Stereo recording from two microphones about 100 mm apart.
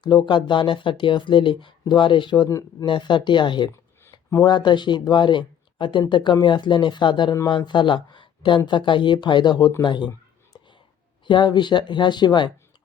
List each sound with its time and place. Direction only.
0.0 s speech: 50° left (ahead or behind)
11.3 s speech: 50° left (ahead or behind)